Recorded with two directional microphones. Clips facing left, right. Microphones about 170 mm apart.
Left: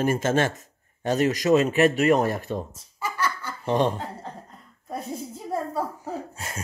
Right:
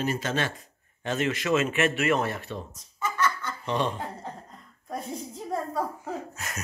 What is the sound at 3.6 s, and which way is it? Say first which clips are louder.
Speech: left 6 dB; 50° left (ahead or behind).